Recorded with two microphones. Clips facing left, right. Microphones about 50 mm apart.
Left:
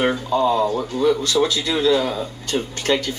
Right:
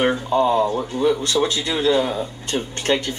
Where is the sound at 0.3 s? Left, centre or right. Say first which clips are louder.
Even; right; by 3.0 s centre.